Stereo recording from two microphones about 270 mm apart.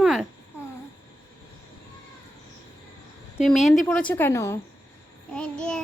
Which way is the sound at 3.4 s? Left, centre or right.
Centre.